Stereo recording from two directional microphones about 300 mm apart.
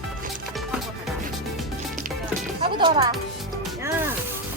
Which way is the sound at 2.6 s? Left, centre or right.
Centre.